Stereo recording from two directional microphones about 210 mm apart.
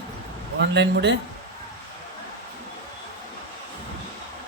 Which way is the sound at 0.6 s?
55° right (ahead or behind).